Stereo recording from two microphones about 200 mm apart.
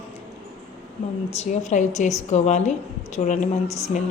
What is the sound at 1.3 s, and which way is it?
A woman's voice, 35° left (ahead or behind).